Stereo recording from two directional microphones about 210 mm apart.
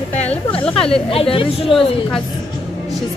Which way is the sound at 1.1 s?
25° left (ahead or behind).